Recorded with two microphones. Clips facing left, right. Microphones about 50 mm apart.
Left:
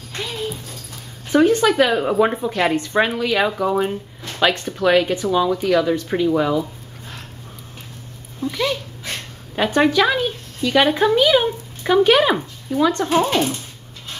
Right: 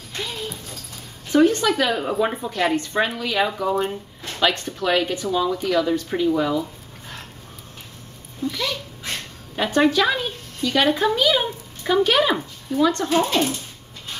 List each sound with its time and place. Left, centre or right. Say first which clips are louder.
1.3 s speech: left 2 dB; left
8.5 s a woman's voice: left 4 dB; centre